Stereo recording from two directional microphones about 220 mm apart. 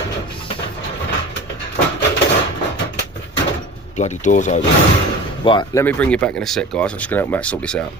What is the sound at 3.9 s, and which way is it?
Speech, 30° left (ahead or behind).